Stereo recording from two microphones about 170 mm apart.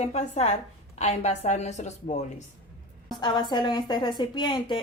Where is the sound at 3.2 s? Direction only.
25° left (ahead or behind).